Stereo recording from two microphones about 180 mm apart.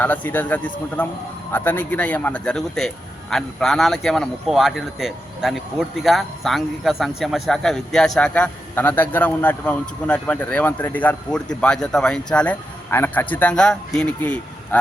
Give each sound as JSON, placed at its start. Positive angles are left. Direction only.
{"t": 0.0, "sound": "a man's voice", "side_deg": 10}